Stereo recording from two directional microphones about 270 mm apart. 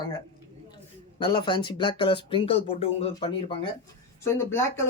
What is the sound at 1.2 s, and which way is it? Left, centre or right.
Speech, centre.